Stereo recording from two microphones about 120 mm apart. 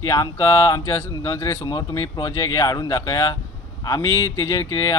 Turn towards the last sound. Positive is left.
turn(degrees=30)  # may be behind; listen again after turning